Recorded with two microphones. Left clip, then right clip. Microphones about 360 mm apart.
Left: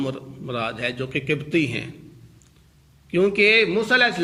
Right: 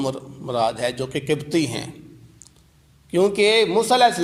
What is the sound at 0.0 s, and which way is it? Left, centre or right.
A man's voice, centre.